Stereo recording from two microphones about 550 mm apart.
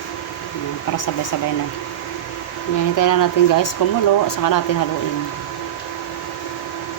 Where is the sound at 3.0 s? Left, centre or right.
Left.